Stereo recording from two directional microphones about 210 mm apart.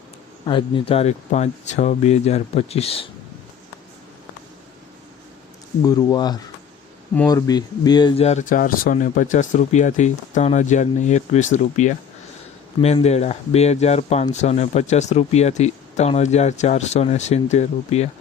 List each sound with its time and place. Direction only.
0.4 s speech: 25° left (ahead or behind)
5.8 s speech: 15° left (ahead or behind)